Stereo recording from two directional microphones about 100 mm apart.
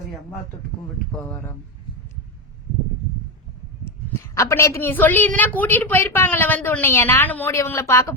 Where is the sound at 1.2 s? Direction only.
30° left (ahead or behind).